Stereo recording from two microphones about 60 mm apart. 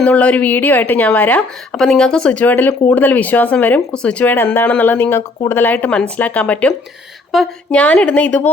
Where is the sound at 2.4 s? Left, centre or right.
Left.